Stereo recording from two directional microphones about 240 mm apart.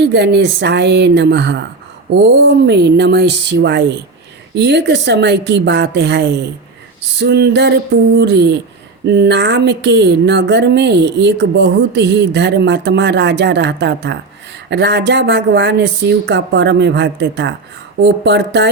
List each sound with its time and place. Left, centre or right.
0.0 s speech: right
2.6 s speech: right